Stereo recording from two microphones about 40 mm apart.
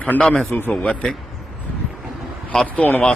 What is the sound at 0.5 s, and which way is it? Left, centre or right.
Speech, left.